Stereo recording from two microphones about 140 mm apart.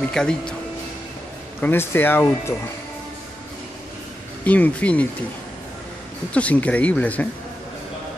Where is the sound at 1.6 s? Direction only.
15° left (ahead or behind).